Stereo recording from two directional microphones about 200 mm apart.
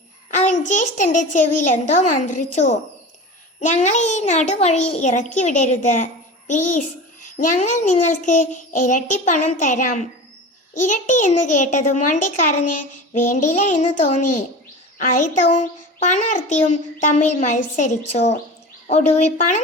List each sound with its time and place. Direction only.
0.3 s a child's voice: 35° left (ahead or behind)